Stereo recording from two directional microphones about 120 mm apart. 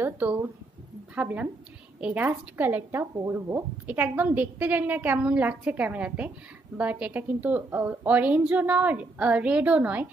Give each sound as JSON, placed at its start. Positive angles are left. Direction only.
{"t": 0.0, "sound": "a woman's voice", "side_deg": -20}